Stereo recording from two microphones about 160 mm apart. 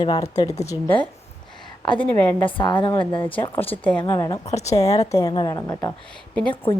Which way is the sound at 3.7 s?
10° left (ahead or behind).